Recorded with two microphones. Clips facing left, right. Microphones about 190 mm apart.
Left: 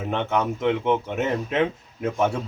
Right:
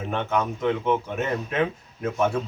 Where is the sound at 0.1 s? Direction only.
20° left (ahead or behind).